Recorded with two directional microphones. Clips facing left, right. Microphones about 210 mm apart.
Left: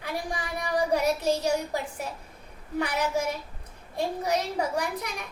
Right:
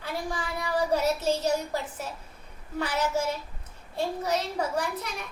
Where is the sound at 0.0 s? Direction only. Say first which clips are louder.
Even; 15° left (ahead or behind).